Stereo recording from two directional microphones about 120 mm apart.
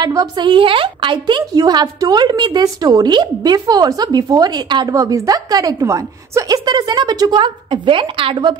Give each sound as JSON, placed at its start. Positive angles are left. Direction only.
{"t": 0.0, "sound": "a woman's voice", "side_deg": -35}